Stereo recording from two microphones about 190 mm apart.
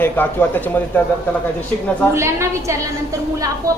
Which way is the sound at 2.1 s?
15° right (ahead or behind).